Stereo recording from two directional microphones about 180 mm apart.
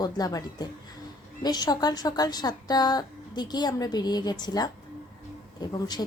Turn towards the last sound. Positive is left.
turn(degrees=20)  # may be behind; listen again after turning